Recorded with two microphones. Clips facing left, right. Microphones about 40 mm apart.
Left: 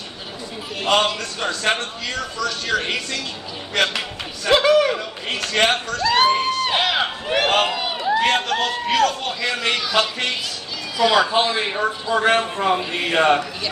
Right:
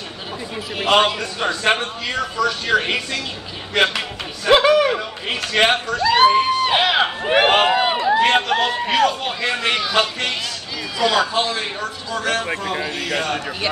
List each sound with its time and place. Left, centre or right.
0.7 s speech: centre
7.7 s a sound: right
8.1 s speech: centre
11.0 s a man's voice: centre
12.1 s a man's voice: left